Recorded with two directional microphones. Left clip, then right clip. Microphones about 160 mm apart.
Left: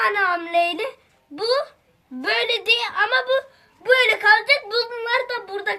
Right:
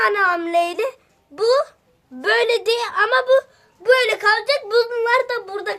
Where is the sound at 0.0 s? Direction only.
55° right (ahead or behind).